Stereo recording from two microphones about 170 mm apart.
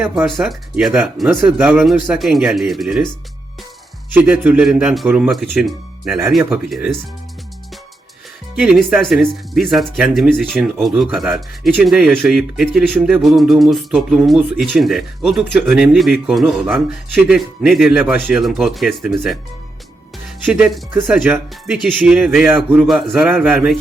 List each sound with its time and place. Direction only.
0.4 s speech: centre (ahead or behind)
4.1 s speech: 10° right (ahead or behind)
8.5 s speech: 5° right (ahead or behind)
20.4 s speech: 5° right (ahead or behind)